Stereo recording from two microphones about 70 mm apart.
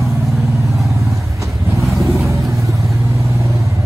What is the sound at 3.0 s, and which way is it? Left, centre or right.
Vehicle, right.